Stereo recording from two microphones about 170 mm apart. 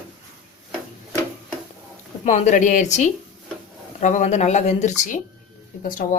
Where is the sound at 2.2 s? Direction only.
45° left (ahead or behind).